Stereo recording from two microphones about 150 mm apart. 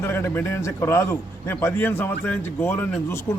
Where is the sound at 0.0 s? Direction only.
15° left (ahead or behind).